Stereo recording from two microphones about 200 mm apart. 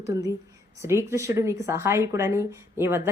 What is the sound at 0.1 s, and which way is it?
A woman's voice, 15° right (ahead or behind).